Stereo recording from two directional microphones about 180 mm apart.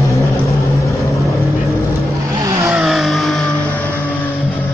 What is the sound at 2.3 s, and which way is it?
Vehicle, 15° right (ahead or behind).